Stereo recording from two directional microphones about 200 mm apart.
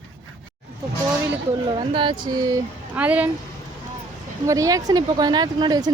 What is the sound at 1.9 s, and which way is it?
Speech, 25° right (ahead or behind).